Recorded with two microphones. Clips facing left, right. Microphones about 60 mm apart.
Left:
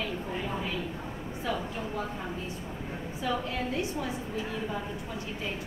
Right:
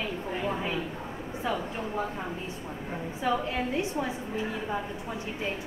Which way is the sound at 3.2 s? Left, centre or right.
Right.